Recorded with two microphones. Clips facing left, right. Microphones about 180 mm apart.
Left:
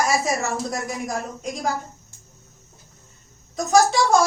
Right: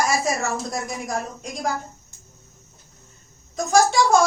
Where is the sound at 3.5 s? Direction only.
Centre (ahead or behind).